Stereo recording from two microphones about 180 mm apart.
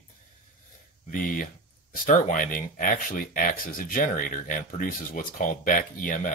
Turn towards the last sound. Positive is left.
turn(degrees=45)  # may be behind; listen again after turning